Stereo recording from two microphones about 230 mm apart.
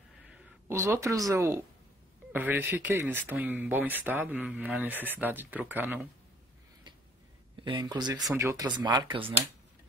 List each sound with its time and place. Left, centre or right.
0.7 s speech: centre
7.6 s speech: centre
8.1 s speech: centre
8.4 s speech: centre